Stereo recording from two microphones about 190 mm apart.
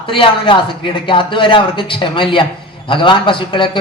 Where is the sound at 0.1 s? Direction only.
25° left (ahead or behind).